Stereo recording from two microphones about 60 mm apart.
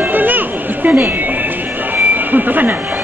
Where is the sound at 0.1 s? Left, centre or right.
Right.